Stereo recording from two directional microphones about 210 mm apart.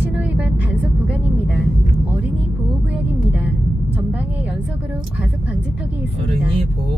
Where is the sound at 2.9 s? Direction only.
5° right (ahead or behind).